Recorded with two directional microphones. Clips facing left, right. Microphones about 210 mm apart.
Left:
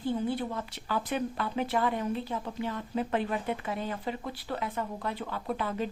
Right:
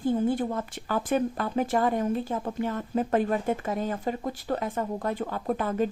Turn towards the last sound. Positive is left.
turn(degrees=-45)  # may be behind; listen again after turning